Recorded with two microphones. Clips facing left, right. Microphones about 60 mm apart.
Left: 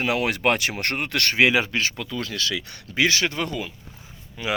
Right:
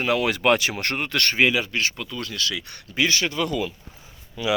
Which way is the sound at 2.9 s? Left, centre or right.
Left.